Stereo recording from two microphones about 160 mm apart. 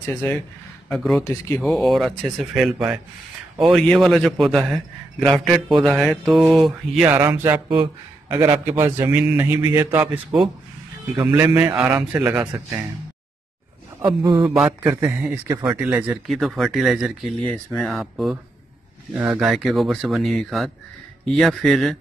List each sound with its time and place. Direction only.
0.1 s speech: 10° left (ahead or behind)
1.2 s speech: 20° left (ahead or behind)
1.6 s speech: centre (ahead or behind)
7.1 s a man's voice: 15° right (ahead or behind)
11.1 s speech: 20° right (ahead or behind)
11.5 s a man's voice: 5° right (ahead or behind)
14.0 s speech: 30° right (ahead or behind)
14.5 s a man's voice: 5° right (ahead or behind)